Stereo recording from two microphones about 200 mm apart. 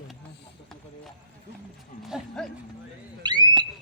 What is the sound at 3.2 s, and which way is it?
Speech, 20° right (ahead or behind).